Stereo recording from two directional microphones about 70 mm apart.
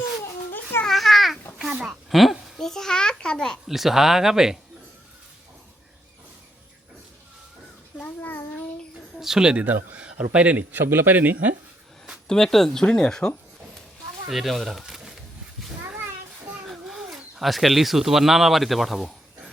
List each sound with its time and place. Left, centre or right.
0.9 s a sound: centre
1.5 s a child's voice: centre
1.9 s a child's voice: centre
3.7 s speech: centre
8.0 s child singing: left
9.1 s speech: centre; by 11.5 s right
12.3 s a child's voice: centre
14.3 s speech: centre
16.6 s speech: centre